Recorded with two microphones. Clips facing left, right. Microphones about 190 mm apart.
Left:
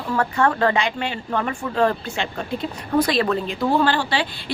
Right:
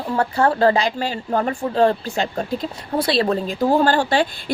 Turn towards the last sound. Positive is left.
turn(degrees=-45)  # may be behind; listen again after turning